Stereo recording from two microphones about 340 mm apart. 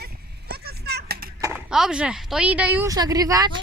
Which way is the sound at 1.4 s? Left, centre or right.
Centre.